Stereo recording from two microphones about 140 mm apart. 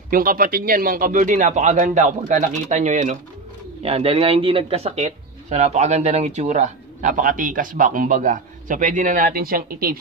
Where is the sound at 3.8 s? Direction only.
45° right (ahead or behind).